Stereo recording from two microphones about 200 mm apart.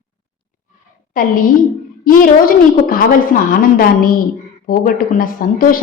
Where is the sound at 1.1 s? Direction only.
45° left (ahead or behind).